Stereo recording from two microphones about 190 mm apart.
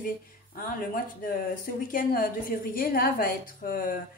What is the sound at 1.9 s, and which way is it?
A woman's voice, 50° left (ahead or behind).